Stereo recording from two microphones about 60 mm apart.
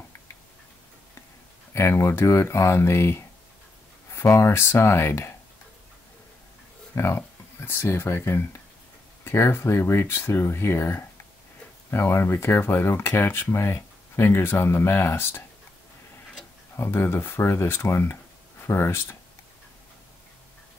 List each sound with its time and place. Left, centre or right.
1.7 s speech: left
7.0 s speech: left
16.7 s speech: left